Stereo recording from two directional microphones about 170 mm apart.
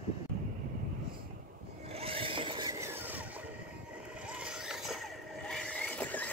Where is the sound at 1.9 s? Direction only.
35° right (ahead or behind).